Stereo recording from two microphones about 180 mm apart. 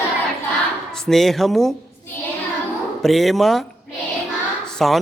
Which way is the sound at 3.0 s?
Centre (ahead or behind).